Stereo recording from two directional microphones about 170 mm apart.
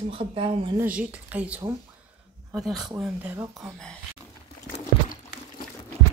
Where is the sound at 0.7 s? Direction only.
10° right (ahead or behind).